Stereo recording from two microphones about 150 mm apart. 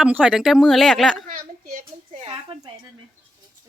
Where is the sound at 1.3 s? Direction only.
60° right (ahead or behind).